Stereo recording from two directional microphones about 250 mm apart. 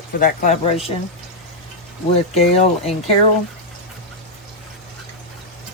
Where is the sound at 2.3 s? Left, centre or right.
Left.